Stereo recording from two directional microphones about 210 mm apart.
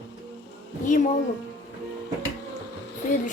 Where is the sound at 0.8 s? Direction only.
35° left (ahead or behind).